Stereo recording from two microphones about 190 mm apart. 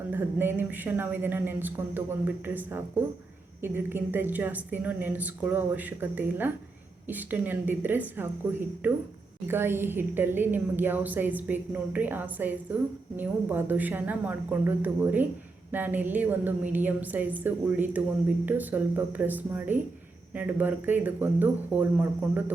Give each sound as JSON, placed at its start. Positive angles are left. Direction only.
{"t": 0.1, "sound": "a woman's voice", "side_deg": -10}